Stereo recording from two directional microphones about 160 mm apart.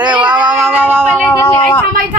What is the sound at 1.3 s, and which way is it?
Speech, 15° left (ahead or behind).